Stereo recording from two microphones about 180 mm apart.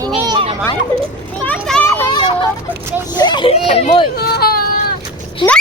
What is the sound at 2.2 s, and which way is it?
Vehicle, 30° left (ahead or behind).